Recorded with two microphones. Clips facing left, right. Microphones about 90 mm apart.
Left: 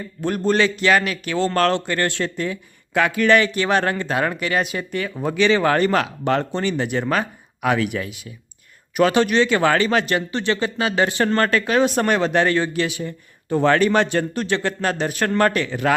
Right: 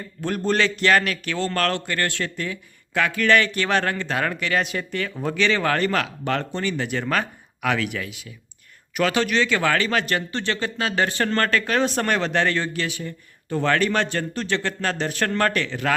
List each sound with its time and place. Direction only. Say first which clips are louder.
0.2 s a man's voice: left 3 dB; 5° left (ahead or behind)